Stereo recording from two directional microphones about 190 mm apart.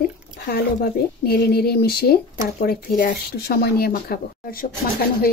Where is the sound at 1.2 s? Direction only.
55° left (ahead or behind).